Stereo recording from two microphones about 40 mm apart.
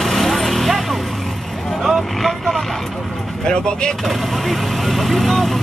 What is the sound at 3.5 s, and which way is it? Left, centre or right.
Speech, left.